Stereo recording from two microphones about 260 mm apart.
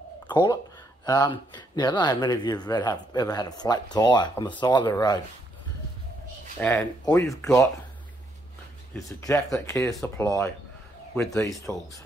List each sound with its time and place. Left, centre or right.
0.3 s speech: centre
6.6 s speech: centre
8.9 s speech: centre